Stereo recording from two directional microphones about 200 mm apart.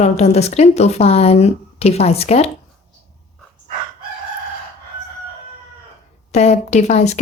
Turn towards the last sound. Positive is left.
turn(degrees=35)  # may be behind; listen again after turning